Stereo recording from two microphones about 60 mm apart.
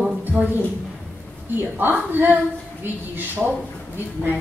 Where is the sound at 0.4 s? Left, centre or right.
Right.